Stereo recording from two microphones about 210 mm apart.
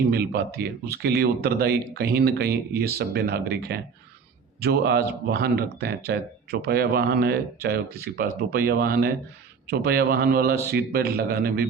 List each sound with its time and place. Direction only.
0.1 s speech: 50° right (ahead or behind)